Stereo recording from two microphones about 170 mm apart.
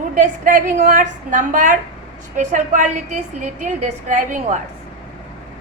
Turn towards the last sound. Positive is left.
turn(degrees=-45)  # may be behind; listen again after turning